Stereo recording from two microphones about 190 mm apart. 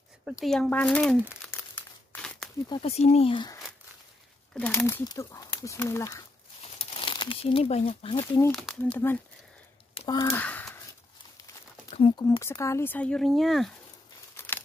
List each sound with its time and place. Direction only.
0.2 s speech: centre (ahead or behind)
1.4 s crumpling: 10° left (ahead or behind)
2.7 s speech: 30° left (ahead or behind)
4.6 s speech: 10° left (ahead or behind)
6.6 s speech: 30° left (ahead or behind)
8.5 s speech: 5° left (ahead or behind)
9.9 s a sound: 20° left (ahead or behind)
12.0 s speech: 20° left (ahead or behind); by 13.7 s centre (ahead or behind)
14.3 s crumpling: 10° left (ahead or behind)